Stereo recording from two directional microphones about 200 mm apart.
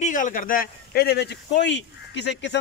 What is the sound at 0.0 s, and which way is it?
Speech, 40° left (ahead or behind).